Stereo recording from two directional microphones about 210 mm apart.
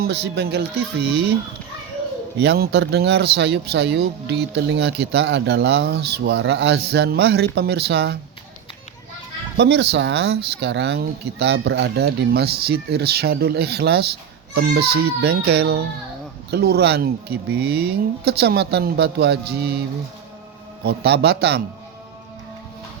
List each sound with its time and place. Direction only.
0.0 s speech: 50° right (ahead or behind)
2.4 s speech: 50° right (ahead or behind)
9.6 s speech: 55° right (ahead or behind)
20.8 s speech: 50° right (ahead or behind)